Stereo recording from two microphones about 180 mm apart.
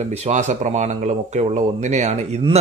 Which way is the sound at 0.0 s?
40° right (ahead or behind).